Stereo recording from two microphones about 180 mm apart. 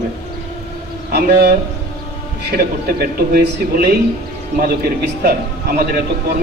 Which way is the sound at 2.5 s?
55° right (ahead or behind).